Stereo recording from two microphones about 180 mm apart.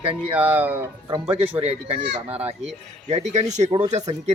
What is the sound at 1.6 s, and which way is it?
Speech, 35° right (ahead or behind).